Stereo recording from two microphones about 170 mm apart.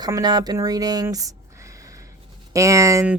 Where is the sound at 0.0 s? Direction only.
25° right (ahead or behind).